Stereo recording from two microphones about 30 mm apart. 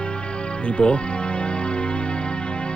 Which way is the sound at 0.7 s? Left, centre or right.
Left.